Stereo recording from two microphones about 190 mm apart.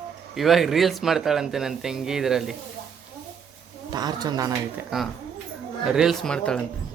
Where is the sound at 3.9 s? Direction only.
20° right (ahead or behind).